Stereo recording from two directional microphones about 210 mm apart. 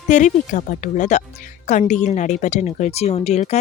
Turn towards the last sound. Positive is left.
turn(degrees=30)  # may be behind; listen again after turning